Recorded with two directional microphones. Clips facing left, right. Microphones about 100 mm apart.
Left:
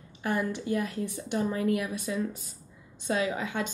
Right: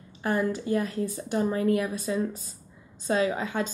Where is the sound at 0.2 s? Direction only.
35° right (ahead or behind).